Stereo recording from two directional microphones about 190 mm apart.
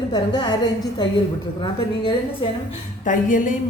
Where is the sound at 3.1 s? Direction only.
45° left (ahead or behind).